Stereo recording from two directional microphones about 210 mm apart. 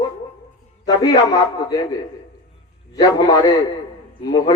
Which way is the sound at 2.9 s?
20° left (ahead or behind).